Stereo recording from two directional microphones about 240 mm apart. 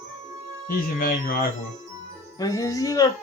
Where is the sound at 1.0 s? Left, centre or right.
Left.